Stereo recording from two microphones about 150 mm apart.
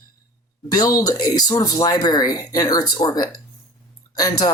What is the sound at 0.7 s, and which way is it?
Speech, 25° left (ahead or behind).